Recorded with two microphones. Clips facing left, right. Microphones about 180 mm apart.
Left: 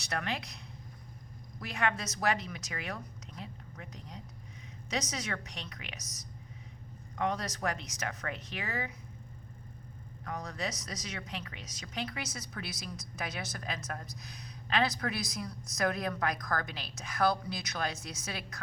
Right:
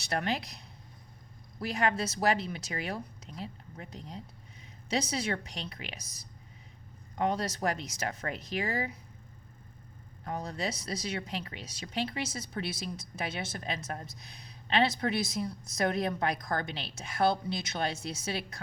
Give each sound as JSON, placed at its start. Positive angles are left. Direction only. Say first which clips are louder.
{"t": 0.0, "sound": "speech", "louder": "right 4 dB", "side_deg": -30}
{"t": 10.2, "sound": "speech", "louder": "right 3 dB", "side_deg": -30}